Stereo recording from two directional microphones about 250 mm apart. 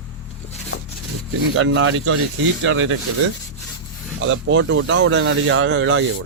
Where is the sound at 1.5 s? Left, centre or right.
Right.